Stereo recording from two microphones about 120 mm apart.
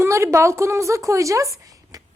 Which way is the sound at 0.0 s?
25° right (ahead or behind).